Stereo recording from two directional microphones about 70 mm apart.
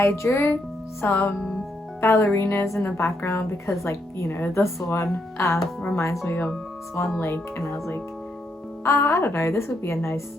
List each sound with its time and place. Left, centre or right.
0.0 s speech: left
4.6 s speech: left
7.6 s speech: left